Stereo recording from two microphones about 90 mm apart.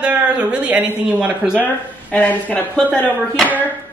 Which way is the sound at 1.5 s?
15° left (ahead or behind).